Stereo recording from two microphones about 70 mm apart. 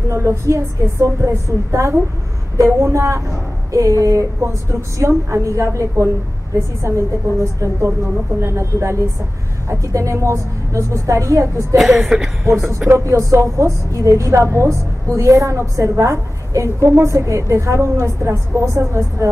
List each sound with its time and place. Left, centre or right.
0.1 s a woman's voice: right
11.7 s speech: centre
13.0 s a woman's voice: right